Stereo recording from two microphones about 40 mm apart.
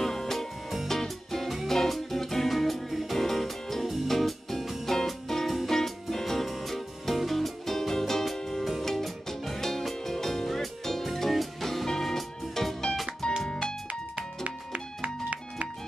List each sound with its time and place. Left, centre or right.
0.0 s music: centre
13.2 s music: centre
14.1 s music: right